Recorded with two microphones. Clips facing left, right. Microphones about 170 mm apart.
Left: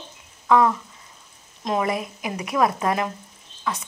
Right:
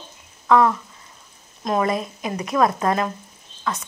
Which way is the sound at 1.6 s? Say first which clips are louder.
Right 2 dB; 15° left (ahead or behind).